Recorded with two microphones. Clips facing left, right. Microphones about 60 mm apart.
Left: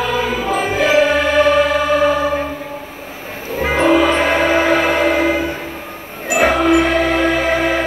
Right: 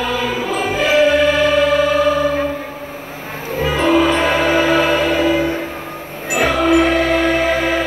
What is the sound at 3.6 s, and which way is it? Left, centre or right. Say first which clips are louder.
Music: left 1 dB; left.